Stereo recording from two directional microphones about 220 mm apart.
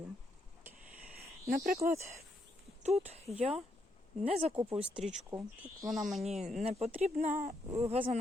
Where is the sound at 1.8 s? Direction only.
15° right (ahead or behind).